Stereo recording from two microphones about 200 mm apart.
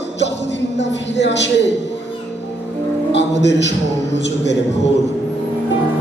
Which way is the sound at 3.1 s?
60° left (ahead or behind).